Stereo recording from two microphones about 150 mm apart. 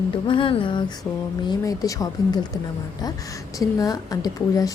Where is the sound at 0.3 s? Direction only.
35° left (ahead or behind).